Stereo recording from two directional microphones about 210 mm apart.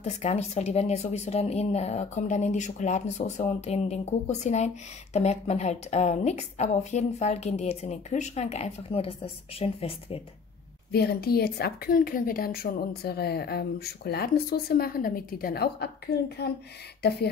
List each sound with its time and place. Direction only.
0.0 s a woman's voice: 30° left (ahead or behind)
10.9 s speech: 50° left (ahead or behind)
17.0 s speech: 50° left (ahead or behind)